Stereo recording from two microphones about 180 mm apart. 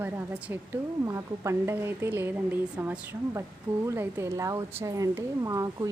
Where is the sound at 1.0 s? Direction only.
15° right (ahead or behind).